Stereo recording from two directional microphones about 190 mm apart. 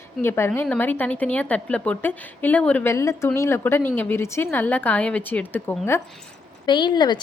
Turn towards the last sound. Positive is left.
turn(degrees=25)  # may be behind; listen again after turning